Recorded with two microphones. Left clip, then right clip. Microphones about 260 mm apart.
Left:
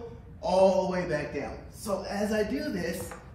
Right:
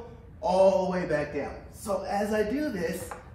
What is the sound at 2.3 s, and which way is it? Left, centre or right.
Music, centre.